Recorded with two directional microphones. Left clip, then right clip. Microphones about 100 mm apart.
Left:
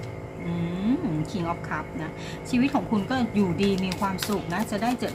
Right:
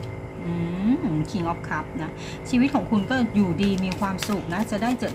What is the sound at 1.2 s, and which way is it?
A woman's voice, 30° right (ahead or behind).